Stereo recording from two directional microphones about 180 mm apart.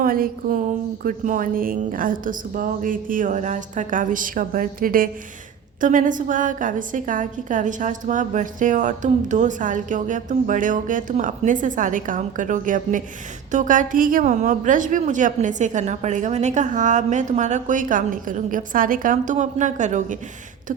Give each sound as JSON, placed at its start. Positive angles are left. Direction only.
{"t": 0.0, "sound": "a woman's voice", "side_deg": -50}